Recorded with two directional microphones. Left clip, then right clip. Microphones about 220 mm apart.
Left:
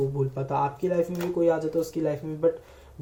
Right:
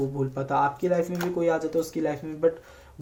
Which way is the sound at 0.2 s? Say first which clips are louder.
Right 2 dB; 35° right (ahead or behind).